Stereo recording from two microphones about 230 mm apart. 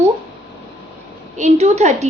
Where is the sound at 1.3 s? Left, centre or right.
Right.